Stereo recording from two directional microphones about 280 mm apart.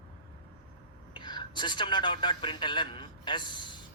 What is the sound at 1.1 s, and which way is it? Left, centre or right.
A man's voice, centre.